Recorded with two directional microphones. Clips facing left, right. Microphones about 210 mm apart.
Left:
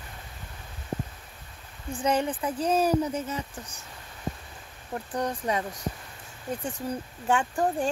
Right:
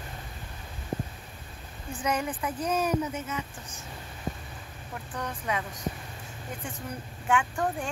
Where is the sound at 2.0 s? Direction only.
30° left (ahead or behind).